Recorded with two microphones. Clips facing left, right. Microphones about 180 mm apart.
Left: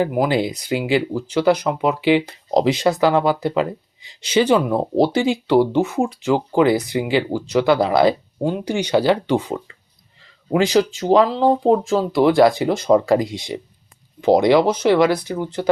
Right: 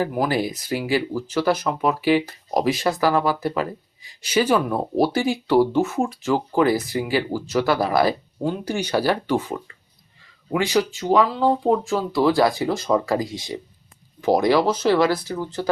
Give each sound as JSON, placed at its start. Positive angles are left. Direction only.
{"t": 0.0, "sound": "speech", "side_deg": 20}